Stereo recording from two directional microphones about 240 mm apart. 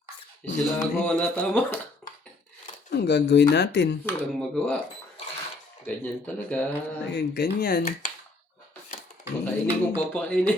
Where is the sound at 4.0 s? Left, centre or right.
Centre.